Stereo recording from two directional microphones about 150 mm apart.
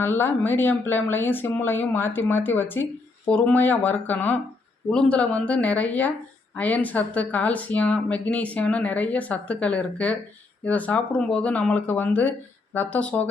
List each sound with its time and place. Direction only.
0.0 s speech: 15° left (ahead or behind)